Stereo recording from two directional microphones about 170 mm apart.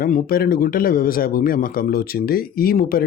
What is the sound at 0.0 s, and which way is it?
Speech, 60° left (ahead or behind).